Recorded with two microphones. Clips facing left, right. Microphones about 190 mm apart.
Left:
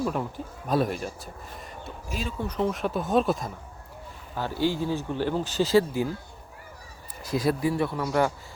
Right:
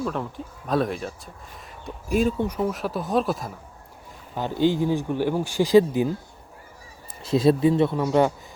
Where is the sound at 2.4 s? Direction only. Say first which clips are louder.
Right 2 dB; 5° right (ahead or behind).